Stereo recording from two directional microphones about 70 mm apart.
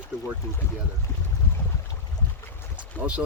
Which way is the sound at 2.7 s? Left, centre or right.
Centre.